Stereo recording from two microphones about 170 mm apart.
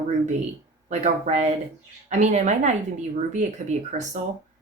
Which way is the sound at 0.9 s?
40° right (ahead or behind).